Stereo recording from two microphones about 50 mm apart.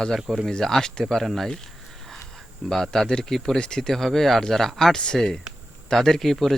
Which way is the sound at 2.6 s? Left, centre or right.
Centre.